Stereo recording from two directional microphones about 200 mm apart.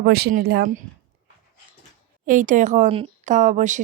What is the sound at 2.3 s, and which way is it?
A woman's voice, 40° right (ahead or behind).